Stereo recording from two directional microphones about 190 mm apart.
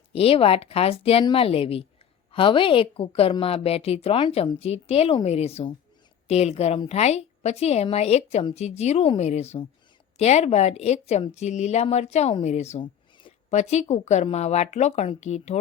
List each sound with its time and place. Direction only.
0.1 s a woman's voice: 30° left (ahead or behind)